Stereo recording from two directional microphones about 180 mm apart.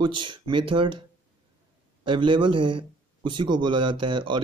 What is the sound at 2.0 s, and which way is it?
Speech, 25° right (ahead or behind).